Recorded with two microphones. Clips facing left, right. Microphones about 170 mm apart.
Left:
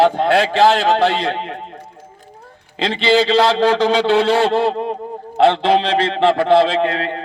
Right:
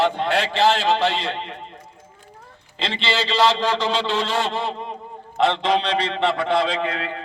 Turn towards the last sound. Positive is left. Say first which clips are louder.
# left 7 dB
turn(degrees=30)  # may be behind; listen again after turning